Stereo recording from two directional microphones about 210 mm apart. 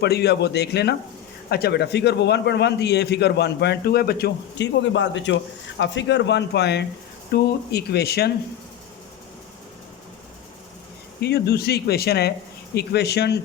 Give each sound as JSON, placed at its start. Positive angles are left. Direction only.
{"t": 0.0, "sound": "a man's voice", "side_deg": 50}
{"t": 11.2, "sound": "a man's voice", "side_deg": 50}